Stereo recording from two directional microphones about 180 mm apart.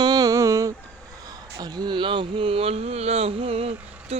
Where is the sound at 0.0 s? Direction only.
20° right (ahead or behind).